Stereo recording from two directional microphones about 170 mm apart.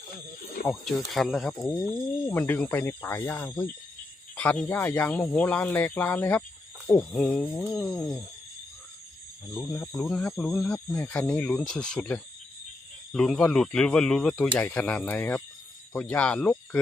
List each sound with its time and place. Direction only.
0.7 s speech: centre (ahead or behind)
1.5 s speech: 20° left (ahead or behind)
4.4 s a sound: 10° left (ahead or behind)
4.7 s speech: 10° left (ahead or behind)
9.6 s speech: 15° left (ahead or behind)
10.3 s speech: centre (ahead or behind)
10.8 s speech: 10° left (ahead or behind)